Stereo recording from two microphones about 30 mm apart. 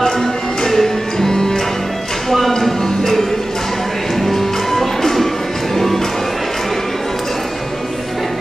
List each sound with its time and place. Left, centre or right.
0.7 s music: centre
2.2 s a sound: centre
2.8 s music: centre